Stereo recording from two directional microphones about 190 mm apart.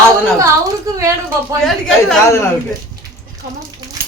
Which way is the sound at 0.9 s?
15° right (ahead or behind).